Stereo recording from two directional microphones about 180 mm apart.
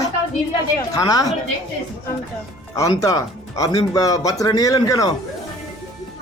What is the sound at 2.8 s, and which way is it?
Speech, 20° left (ahead or behind).